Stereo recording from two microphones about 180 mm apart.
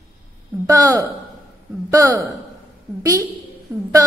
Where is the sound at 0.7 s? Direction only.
20° right (ahead or behind).